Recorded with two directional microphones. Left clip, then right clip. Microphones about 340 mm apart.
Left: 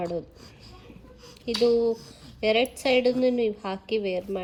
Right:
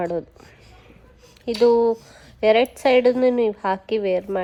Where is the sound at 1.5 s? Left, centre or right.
Centre.